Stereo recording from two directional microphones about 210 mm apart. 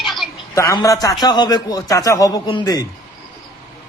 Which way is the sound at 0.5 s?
15° left (ahead or behind).